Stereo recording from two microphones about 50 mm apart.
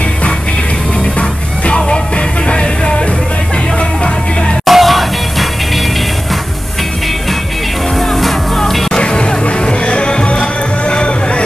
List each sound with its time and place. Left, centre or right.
1.9 s music: left
4.6 s music: centre
8.1 s music: centre; by 11.4 s left